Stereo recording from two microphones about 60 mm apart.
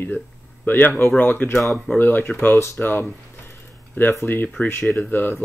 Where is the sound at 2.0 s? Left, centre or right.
Left.